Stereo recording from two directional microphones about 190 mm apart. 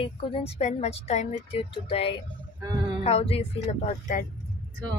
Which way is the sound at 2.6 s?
20° right (ahead or behind).